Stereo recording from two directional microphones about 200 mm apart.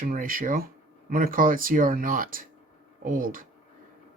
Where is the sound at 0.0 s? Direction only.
45° right (ahead or behind).